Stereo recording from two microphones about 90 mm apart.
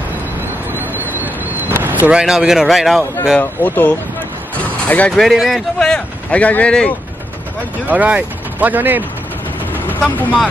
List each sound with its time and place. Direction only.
0.7 s a sound: 25° right (ahead or behind)
2.0 s speech: 10° right (ahead or behind)
3.3 s speech: 15° left (ahead or behind)
5.1 s speech: centre (ahead or behind)
7.8 s speech: 15° right (ahead or behind)
9.8 s speech: 20° left (ahead or behind)